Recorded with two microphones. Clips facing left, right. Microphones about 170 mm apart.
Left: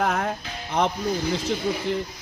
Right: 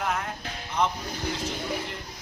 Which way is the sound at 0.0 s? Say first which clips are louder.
Left 6 dB; 90° left.